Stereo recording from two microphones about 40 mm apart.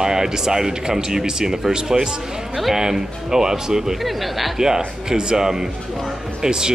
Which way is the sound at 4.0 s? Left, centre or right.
Centre.